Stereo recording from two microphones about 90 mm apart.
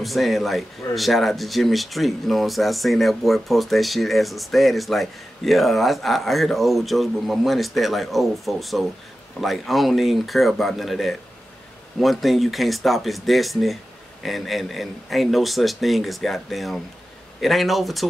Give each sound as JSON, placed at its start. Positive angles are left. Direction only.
{"t": 0.0, "sound": "speech", "side_deg": 0}